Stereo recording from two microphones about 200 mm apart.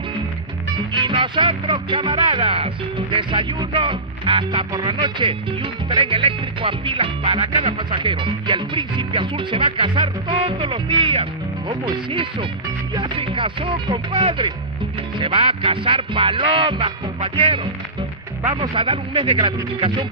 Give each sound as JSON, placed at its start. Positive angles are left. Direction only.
{"t": 0.9, "sound": "music", "side_deg": -25}